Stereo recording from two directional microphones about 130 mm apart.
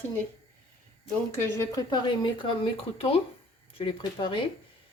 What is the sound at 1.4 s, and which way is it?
A woman's voice, 25° left (ahead or behind).